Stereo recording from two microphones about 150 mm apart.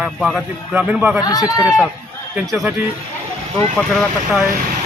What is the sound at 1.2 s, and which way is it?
Speech, 25° left (ahead or behind).